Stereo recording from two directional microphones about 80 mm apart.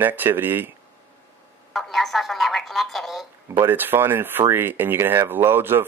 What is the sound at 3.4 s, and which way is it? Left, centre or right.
Speech, right.